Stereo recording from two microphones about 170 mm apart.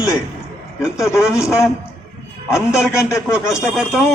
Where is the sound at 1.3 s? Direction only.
15° left (ahead or behind).